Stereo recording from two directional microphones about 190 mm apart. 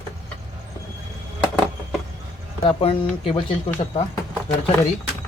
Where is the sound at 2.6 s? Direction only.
30° left (ahead or behind).